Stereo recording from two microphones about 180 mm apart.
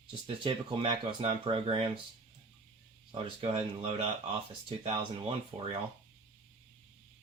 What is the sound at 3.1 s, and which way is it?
Speech, 30° right (ahead or behind).